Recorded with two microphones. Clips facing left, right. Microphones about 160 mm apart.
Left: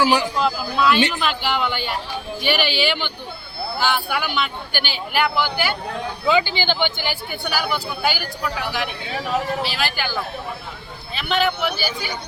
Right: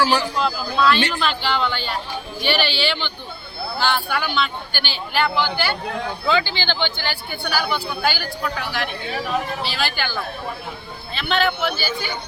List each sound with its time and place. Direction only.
0.0 s speech: 15° left (ahead or behind)
0.3 s speech: 5° left (ahead or behind)
11.1 s speech: 5° left (ahead or behind)